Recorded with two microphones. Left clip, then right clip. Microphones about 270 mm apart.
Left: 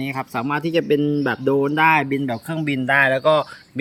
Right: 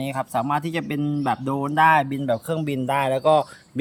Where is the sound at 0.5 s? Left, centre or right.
Right.